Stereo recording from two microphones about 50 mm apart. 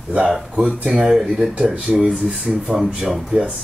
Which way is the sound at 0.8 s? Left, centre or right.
Right.